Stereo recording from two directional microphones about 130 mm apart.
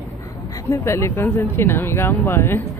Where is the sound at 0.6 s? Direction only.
20° left (ahead or behind).